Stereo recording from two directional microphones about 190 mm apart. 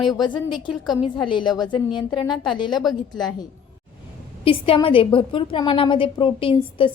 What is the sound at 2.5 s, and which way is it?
Speech, 25° left (ahead or behind).